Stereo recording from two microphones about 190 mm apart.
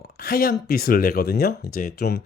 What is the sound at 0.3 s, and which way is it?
Speech, 50° left (ahead or behind).